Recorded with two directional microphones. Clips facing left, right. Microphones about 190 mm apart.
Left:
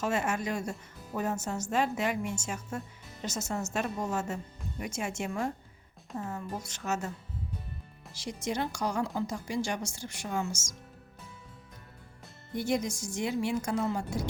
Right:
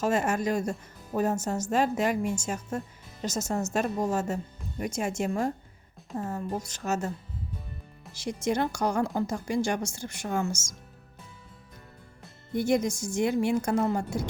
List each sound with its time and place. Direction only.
0.0 s a woman's voice: 40° right (ahead or behind)
8.1 s a woman's voice: 50° right (ahead or behind)
12.5 s a woman's voice: 50° right (ahead or behind)